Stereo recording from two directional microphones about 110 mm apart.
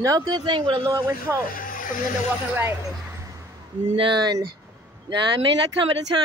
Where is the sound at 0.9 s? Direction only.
30° right (ahead or behind).